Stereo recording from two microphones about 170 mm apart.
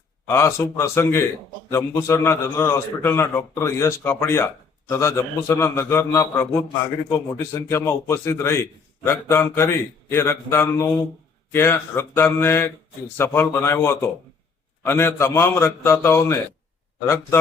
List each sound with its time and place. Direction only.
0.3 s a man's voice: 15° left (ahead or behind)